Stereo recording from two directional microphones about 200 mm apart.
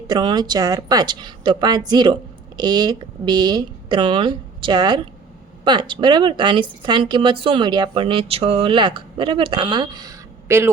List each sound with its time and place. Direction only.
0.1 s speech: 20° right (ahead or behind)